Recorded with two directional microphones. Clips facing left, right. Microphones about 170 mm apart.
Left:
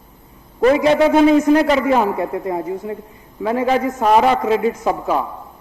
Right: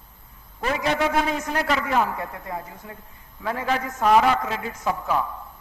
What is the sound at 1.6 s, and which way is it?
A woman's voice, 20° left (ahead or behind).